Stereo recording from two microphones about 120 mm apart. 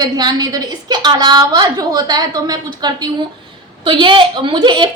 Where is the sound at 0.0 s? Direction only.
35° right (ahead or behind).